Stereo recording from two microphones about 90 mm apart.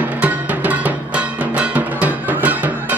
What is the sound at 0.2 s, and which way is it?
Music, 15° right (ahead or behind).